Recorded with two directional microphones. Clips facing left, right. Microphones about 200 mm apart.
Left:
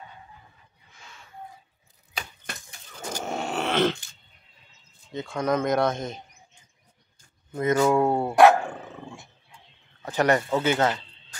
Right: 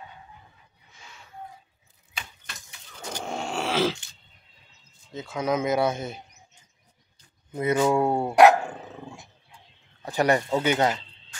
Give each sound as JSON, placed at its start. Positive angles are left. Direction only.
{"t": 2.1, "sound": "typewriter", "side_deg": 45}
{"t": 3.1, "sound": "groan", "side_deg": 5}
{"t": 5.1, "sound": "speech", "side_deg": 0}
{"t": 7.5, "sound": "speech", "side_deg": -10}
{"t": 10.0, "sound": "speech", "side_deg": -10}